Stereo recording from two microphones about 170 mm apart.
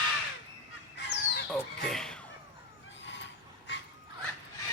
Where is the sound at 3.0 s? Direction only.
90° left.